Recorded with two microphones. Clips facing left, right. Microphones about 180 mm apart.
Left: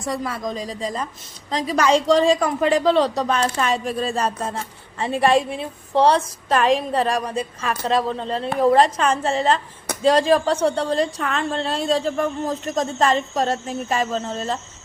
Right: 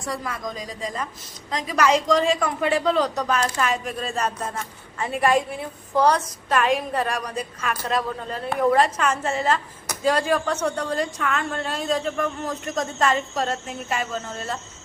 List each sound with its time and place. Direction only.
0.0 s a woman's voice: 25° left (ahead or behind)